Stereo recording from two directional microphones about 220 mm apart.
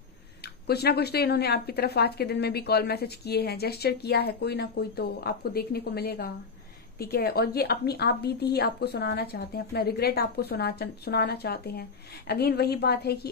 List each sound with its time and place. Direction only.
0.4 s speech: 45° left (ahead or behind)